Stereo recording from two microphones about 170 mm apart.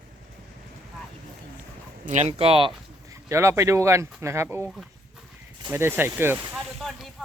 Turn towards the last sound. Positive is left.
turn(degrees=0)  # may be behind; listen again after turning